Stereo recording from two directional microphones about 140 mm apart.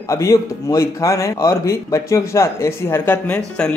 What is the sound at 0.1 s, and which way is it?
Speech, 20° left (ahead or behind).